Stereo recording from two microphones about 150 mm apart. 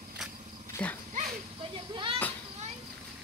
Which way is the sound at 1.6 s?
35° right (ahead or behind).